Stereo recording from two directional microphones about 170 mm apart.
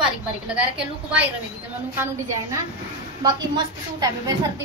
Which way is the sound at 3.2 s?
25° right (ahead or behind).